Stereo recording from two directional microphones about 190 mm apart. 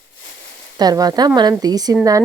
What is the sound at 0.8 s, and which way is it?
Speech, 20° right (ahead or behind).